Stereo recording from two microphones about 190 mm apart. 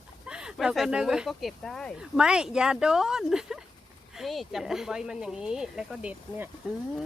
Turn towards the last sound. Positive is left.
turn(degrees=-5)  # may be behind; listen again after turning